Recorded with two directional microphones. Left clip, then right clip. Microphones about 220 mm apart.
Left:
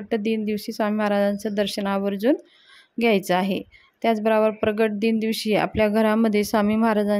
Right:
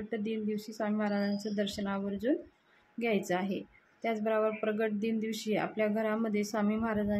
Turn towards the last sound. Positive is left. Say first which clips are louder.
# left 12 dB
turn(degrees=45)  # may be behind; listen again after turning